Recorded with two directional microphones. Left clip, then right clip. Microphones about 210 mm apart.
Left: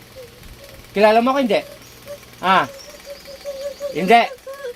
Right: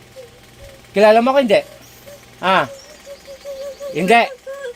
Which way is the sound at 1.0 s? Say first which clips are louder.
Right 3 dB; 50° right (ahead or behind).